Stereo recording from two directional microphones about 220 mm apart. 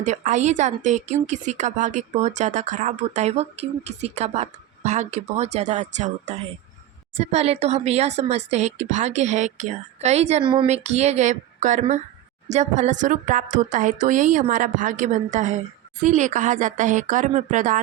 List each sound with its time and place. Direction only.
0.0 s speech: 35° right (ahead or behind)